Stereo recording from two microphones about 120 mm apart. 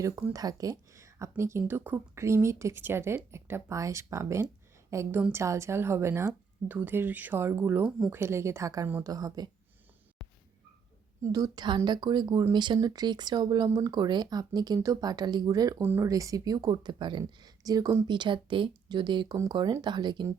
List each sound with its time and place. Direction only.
0.0 s a woman's voice: 20° right (ahead or behind)
0.3 s a woman's voice: 30° right (ahead or behind)
7.9 s speech: 5° right (ahead or behind)
8.1 s a woman's voice: 20° right (ahead or behind)
10.2 s a sound: centre (ahead or behind)
11.2 s speech: 30° right (ahead or behind)
15.8 s speech: 15° right (ahead or behind)
16.0 s speech: 30° right (ahead or behind)